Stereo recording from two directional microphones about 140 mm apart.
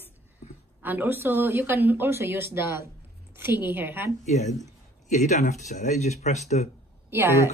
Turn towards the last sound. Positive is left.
turn(degrees=-20)  # may be behind; listen again after turning